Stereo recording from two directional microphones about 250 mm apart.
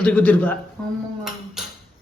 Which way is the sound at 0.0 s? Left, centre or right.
Centre.